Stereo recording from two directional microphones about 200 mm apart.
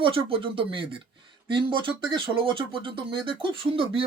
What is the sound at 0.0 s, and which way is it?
Speech, 25° right (ahead or behind).